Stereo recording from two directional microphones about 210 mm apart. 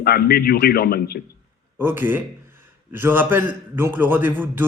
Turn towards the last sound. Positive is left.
turn(degrees=-10)  # may be behind; listen again after turning